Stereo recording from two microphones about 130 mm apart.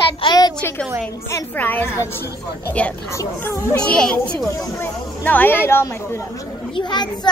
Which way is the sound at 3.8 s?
5° left (ahead or behind).